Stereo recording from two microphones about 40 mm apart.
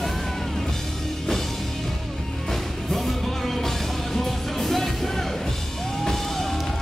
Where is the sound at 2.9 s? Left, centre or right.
Centre.